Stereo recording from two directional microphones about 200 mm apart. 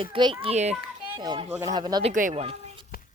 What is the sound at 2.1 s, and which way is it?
Speech, 40° right (ahead or behind).